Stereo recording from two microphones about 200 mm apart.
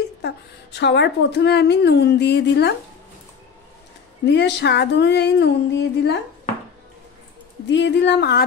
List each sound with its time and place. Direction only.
0.7 s a woman's voice: 60° left (ahead or behind)
4.3 s a woman's voice: 60° left (ahead or behind)
7.6 s a woman's voice: 60° left (ahead or behind)